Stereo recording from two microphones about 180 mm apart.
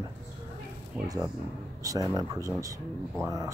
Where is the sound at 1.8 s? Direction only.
20° right (ahead or behind).